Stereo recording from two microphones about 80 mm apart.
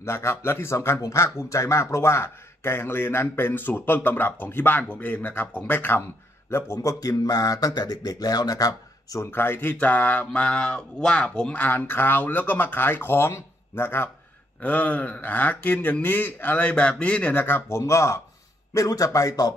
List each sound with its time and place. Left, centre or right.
0.0 s speech: left
6.5 s speech: left
9.2 s speech: left
17.6 s speech: left